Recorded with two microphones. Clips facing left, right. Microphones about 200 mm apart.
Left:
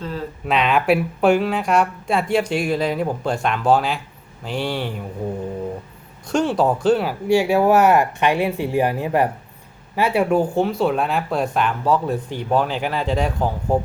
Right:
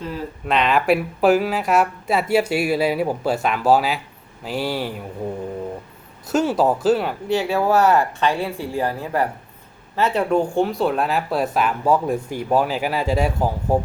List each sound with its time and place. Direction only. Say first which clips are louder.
0.4 s speech: even; centre (ahead or behind)
6.3 s speech: even; 5° right (ahead or behind)